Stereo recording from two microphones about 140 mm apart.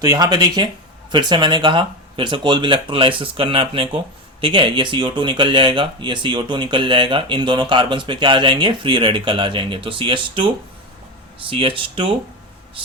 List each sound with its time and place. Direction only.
0.0 s speech: 30° right (ahead or behind)